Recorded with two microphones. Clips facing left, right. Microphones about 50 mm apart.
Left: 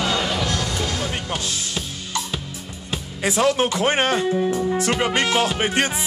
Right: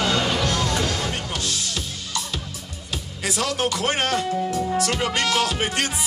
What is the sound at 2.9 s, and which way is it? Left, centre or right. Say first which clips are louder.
Speech: left 4 dB; left.